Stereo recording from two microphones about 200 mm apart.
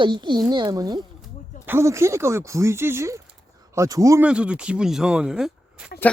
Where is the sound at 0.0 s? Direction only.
20° right (ahead or behind).